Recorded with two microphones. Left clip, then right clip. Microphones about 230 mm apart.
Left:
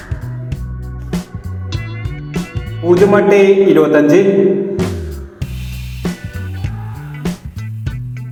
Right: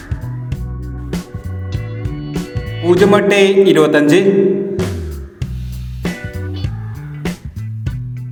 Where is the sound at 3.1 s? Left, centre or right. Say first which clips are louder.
Left 3 dB; right.